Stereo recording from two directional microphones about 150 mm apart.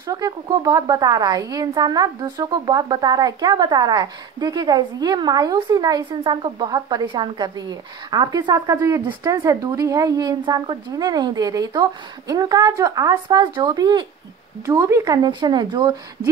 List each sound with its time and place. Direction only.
0.0 s a woman's voice: 25° right (ahead or behind)